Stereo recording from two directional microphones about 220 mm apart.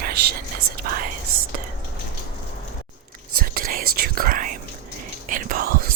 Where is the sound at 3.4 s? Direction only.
40° right (ahead or behind).